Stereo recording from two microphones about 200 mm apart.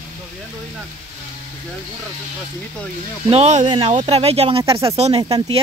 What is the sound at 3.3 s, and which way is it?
Speech, 35° right (ahead or behind).